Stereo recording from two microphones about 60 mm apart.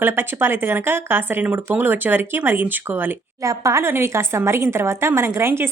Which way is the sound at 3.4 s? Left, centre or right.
Right.